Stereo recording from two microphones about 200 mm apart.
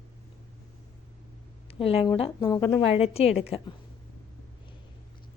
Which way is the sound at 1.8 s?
25° left (ahead or behind).